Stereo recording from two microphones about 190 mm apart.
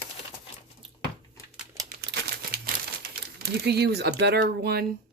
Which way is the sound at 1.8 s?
20° right (ahead or behind).